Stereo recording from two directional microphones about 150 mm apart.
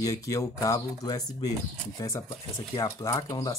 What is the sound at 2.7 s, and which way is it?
Speech, 20° left (ahead or behind).